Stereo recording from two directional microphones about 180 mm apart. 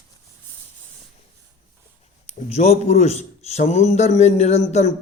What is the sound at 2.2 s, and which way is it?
A man's voice, 40° left (ahead or behind).